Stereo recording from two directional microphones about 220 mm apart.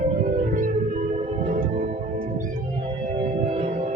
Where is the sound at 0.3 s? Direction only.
35° right (ahead or behind).